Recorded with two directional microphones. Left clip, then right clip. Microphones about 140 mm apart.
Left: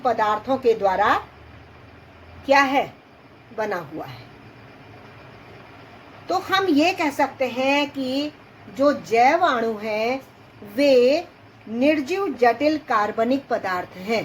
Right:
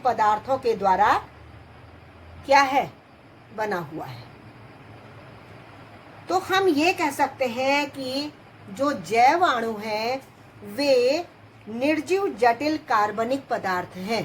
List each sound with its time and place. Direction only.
0.0 s speech: 40° left (ahead or behind)
2.5 s speech: 35° left (ahead or behind)
6.2 s speech: 35° left (ahead or behind)